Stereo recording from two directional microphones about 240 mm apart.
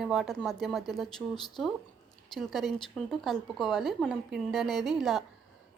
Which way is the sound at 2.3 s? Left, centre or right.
Centre.